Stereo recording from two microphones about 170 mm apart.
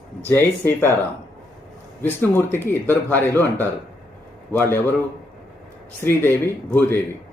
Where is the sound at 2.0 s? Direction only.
10° left (ahead or behind).